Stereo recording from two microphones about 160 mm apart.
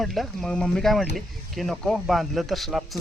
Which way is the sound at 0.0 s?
Centre (ahead or behind).